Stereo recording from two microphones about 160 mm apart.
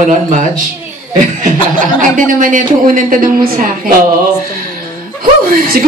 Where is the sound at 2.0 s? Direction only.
55° right (ahead or behind).